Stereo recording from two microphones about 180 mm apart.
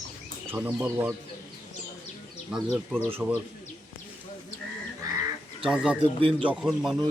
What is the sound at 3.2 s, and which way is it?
Speech, 10° right (ahead or behind).